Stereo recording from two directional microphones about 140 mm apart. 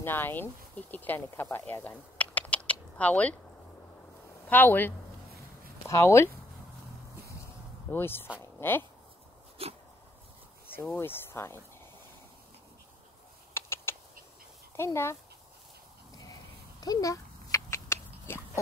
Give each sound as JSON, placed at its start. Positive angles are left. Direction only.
{"t": 0.0, "sound": "speech", "side_deg": 15}
{"t": 4.5, "sound": "speech", "side_deg": 15}
{"t": 7.9, "sound": "speech", "side_deg": 15}
{"t": 9.6, "sound": "dog", "side_deg": -45}
{"t": 11.0, "sound": "speech", "side_deg": 15}
{"t": 13.5, "sound": "typing", "side_deg": 15}
{"t": 14.8, "sound": "speech", "side_deg": 20}
{"t": 16.8, "sound": "a sound", "side_deg": 25}